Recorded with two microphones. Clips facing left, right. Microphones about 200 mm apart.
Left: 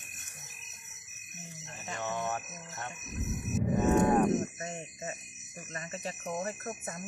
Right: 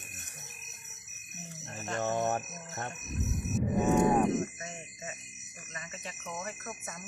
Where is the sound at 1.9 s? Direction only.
45° right (ahead or behind).